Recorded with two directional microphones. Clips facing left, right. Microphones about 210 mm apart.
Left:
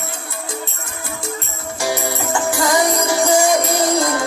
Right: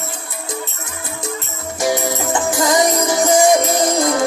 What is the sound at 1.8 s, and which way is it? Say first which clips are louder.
Music: right 3 dB; 20° right (ahead or behind).